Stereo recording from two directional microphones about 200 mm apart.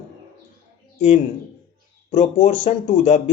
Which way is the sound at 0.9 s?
35° left (ahead or behind).